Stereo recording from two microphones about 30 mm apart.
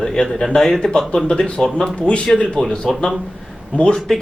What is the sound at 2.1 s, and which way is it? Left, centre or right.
Speech, left.